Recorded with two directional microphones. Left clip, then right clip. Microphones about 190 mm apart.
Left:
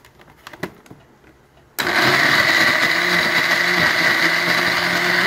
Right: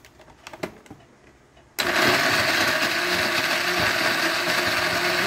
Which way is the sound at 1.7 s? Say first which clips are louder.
Left 4 dB; centre (ahead or behind).